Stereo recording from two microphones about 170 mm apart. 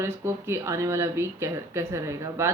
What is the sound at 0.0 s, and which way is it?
Speech, 15° right (ahead or behind).